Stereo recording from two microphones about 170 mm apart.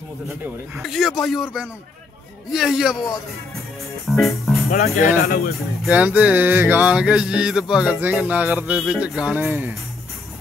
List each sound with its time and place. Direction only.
0.7 s a man's voice: centre (ahead or behind)
4.1 s a man's voice: centre (ahead or behind)
4.8 s speech: 50° left (ahead or behind)
5.9 s music: 10° right (ahead or behind)